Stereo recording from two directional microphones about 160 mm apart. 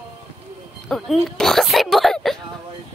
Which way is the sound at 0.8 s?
Centre (ahead or behind).